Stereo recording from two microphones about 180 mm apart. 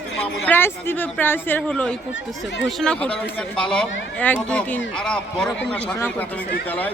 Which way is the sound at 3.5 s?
5° left (ahead or behind).